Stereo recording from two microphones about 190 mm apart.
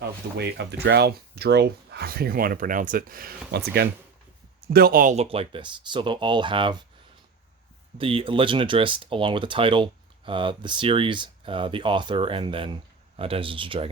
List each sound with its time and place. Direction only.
0.3 s speech: 60° right (ahead or behind)
4.7 s speech: 50° right (ahead or behind); by 6.8 s 25° right (ahead or behind)
7.9 s speech: 30° right (ahead or behind)